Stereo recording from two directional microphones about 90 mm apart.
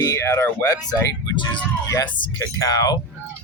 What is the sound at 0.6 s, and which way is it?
Speech, 45° left (ahead or behind).